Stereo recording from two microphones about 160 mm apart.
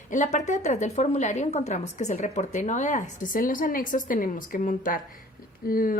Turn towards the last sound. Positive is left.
turn(degrees=60)  # may be behind; listen again after turning